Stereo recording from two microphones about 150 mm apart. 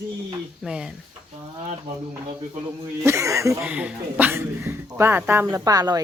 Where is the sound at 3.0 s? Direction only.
20° right (ahead or behind).